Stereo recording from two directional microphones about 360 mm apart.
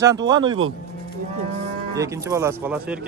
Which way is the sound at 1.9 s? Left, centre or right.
Centre.